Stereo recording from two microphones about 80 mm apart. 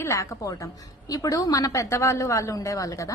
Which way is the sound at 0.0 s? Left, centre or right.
Left.